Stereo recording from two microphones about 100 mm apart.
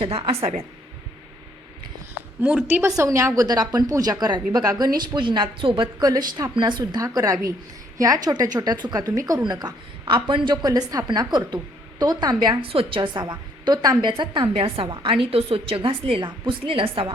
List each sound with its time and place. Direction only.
0.0 s a woman's voice: 70° right (ahead or behind)
2.4 s a woman's voice: 15° right (ahead or behind)
3.4 s a woman's voice: 40° right (ahead or behind); by 5.9 s 60° right (ahead or behind)
6.0 s a woman's voice: 40° right (ahead or behind)
7.0 s a woman's voice: 35° right (ahead or behind)
12.6 s a woman's voice: 65° right (ahead or behind)